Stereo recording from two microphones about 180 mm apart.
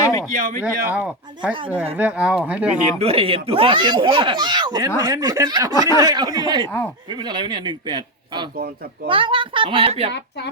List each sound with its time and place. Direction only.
0.0 s a sound: 15° left (ahead or behind)
0.3 s speech: 50° right (ahead or behind)
0.6 s speech: 5° right (ahead or behind)
2.8 s speech: 35° right (ahead or behind)
6.7 s speech: 10° left (ahead or behind)
7.1 s speech: 25° right (ahead or behind)
10.1 s speech: 70° left (ahead or behind)